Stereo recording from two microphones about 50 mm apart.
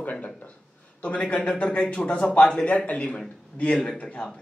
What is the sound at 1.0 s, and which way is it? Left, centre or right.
Speech, left.